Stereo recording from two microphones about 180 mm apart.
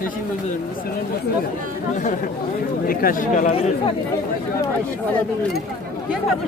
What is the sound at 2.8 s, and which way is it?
Speech, 50° left (ahead or behind).